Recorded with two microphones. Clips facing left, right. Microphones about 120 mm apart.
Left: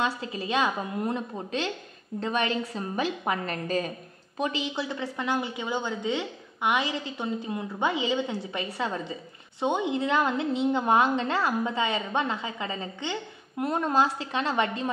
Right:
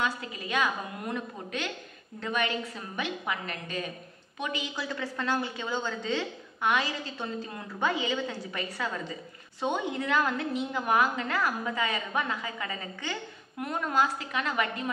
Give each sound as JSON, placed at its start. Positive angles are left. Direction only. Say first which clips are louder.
{"t": 0.0, "sound": "a woman's voice", "louder": "left 3 dB", "side_deg": 30}